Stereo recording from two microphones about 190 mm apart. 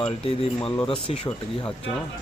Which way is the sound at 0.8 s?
30° left (ahead or behind).